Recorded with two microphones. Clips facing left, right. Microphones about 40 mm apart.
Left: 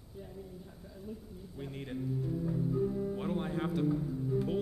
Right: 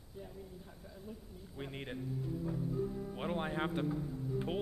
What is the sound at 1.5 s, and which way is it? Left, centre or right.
Speech, right.